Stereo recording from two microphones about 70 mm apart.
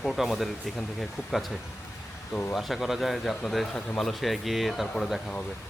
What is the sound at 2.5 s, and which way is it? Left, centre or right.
Speech, centre.